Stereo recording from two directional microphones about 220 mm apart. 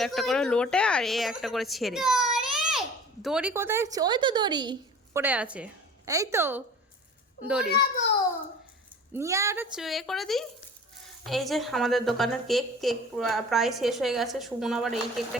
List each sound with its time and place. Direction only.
0.0 s a woman's voice: centre (ahead or behind); by 5.2 s 20° right (ahead or behind)
5.2 s a woman's voice: 5° right (ahead or behind)
9.1 s speech: 15° right (ahead or behind)
9.7 s a woman's voice: centre (ahead or behind)